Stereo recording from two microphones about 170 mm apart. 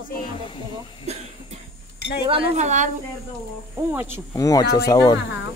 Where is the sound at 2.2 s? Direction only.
35° right (ahead or behind).